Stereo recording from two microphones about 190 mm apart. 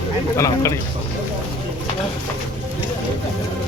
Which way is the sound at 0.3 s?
15° left (ahead or behind).